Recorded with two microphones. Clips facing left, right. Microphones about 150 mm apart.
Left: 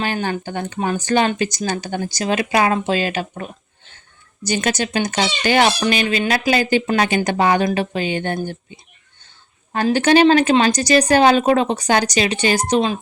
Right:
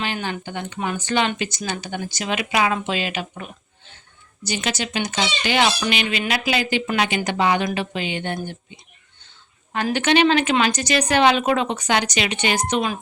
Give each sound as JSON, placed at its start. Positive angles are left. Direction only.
{"t": 0.0, "sound": "speech", "side_deg": 45}